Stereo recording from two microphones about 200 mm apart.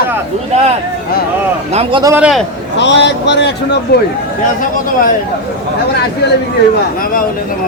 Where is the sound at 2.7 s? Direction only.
60° left (ahead or behind).